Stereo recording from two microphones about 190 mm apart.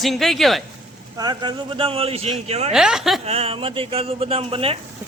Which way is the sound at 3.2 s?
35° right (ahead or behind).